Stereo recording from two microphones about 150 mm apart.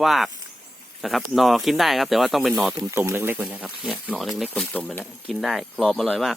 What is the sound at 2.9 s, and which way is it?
Speech, 15° right (ahead or behind).